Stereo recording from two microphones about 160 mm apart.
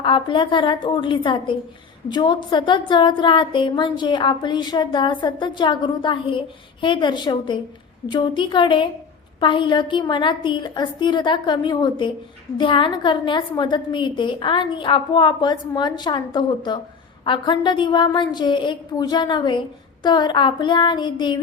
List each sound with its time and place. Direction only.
0.0 s a woman's voice: 30° left (ahead or behind)